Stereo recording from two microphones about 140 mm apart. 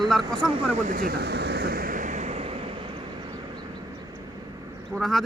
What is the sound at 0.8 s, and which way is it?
Speech, 90° right.